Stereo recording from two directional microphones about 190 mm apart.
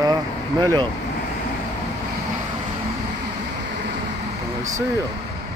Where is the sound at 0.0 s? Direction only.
20° right (ahead or behind).